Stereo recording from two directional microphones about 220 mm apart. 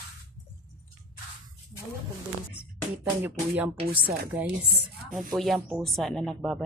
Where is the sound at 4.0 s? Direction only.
45° right (ahead or behind).